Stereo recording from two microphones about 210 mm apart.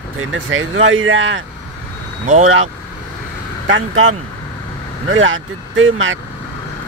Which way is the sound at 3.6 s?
65° right (ahead or behind).